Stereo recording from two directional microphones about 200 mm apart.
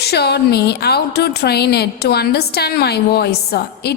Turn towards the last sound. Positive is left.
turn(degrees=55)  # may be behind; listen again after turning